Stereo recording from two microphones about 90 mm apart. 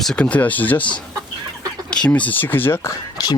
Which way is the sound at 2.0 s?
15° left (ahead or behind).